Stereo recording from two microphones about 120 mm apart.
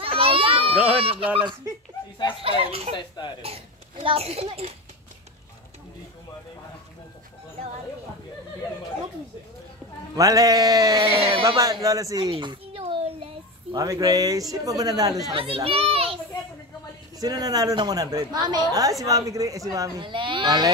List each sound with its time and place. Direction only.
0.0 s children playing: 50° right (ahead or behind)
0.7 s speech: 10° right (ahead or behind)
1.0 s speech: 50° right (ahead or behind)
2.4 s a child's voice: 55° right (ahead or behind)
10.1 s a sound: 30° right (ahead or behind)
12.2 s a sound: 45° right (ahead or behind)
12.8 s child singing: 55° right (ahead or behind)
13.7 s a woman's voice: 30° right (ahead or behind)
15.3 s a child's voice: 50° right (ahead or behind)
17.2 s a woman's voice: 30° right (ahead or behind)
20.0 s a woman's voice: 45° right (ahead or behind)